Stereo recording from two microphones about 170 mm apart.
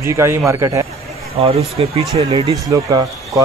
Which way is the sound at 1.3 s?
35° right (ahead or behind).